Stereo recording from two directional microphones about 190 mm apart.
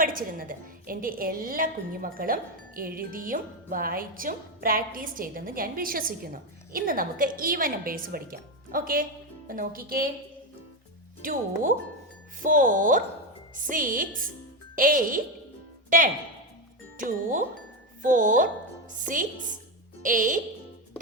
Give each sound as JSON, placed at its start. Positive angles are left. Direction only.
{"t": 0.0, "sound": "a woman's voice", "side_deg": -45}
{"t": 11.2, "sound": "a woman's voice", "side_deg": -45}